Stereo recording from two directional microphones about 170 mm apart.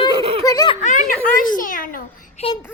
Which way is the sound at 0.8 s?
45° left (ahead or behind).